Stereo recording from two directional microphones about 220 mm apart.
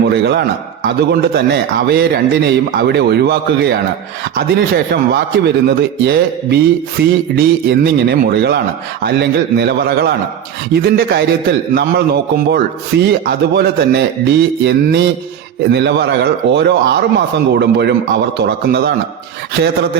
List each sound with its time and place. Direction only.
0.0 s a man's voice: 50° right (ahead or behind)